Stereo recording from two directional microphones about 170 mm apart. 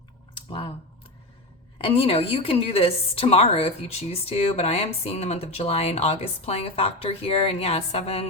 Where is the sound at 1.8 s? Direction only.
35° left (ahead or behind).